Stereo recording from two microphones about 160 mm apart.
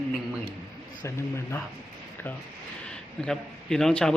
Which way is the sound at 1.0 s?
15° left (ahead or behind).